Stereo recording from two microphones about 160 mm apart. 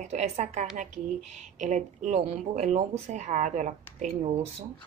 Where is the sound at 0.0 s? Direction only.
45° right (ahead or behind).